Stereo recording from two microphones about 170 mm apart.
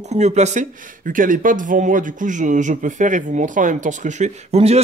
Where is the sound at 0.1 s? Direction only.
40° right (ahead or behind).